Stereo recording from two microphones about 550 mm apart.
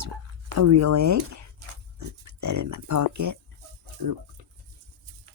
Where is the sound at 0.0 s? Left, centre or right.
Right.